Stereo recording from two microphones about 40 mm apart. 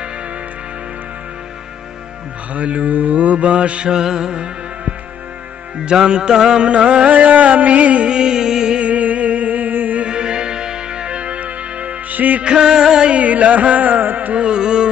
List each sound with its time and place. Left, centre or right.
2.5 s mantra: right
3.9 s music: centre
5.9 s music: centre
6.6 s speech: right
7.1 s mantra: right
8.1 s music: centre
8.7 s music: right
10.0 s music: right
12.4 s music: centre
13.1 s mantra: right
14.4 s speech: right